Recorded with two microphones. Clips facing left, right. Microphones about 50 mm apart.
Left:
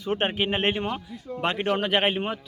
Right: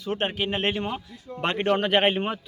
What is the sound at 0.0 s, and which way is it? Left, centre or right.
Speech, left.